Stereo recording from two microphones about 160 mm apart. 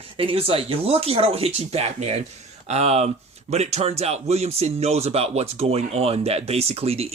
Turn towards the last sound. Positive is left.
turn(degrees=-40)  # may be behind; listen again after turning